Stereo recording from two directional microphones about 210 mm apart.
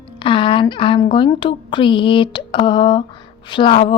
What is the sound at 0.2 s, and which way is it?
Speech, 25° left (ahead or behind).